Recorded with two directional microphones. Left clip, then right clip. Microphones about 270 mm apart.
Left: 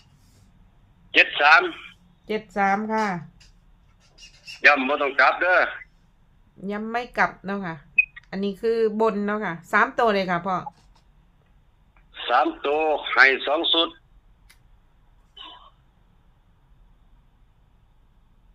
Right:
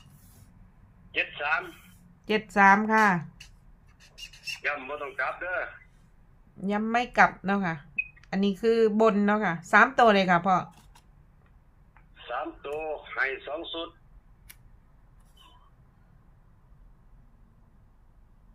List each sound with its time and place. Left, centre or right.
1.1 s a sound: left
2.2 s speech: centre
4.6 s speech: left
6.6 s speech: centre
12.1 s speech: left